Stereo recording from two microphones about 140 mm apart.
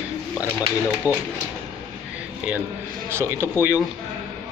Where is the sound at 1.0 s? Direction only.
10° right (ahead or behind).